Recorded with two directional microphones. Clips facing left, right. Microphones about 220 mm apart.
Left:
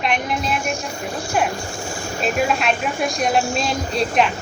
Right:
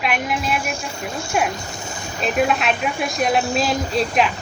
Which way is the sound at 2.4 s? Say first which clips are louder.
Right 2 dB; centre (ahead or behind).